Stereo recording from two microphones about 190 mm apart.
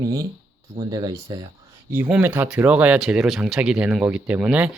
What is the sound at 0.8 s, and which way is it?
Speech, 20° right (ahead or behind).